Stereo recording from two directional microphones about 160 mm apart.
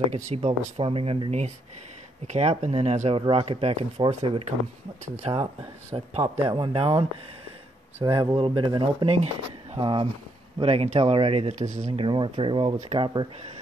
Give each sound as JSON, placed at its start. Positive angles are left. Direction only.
{"t": 0.1, "sound": "speech", "side_deg": -45}
{"t": 11.9, "sound": "speech", "side_deg": -35}